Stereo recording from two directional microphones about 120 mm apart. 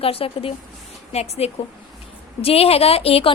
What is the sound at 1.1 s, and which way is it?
A woman's voice, 60° left (ahead or behind).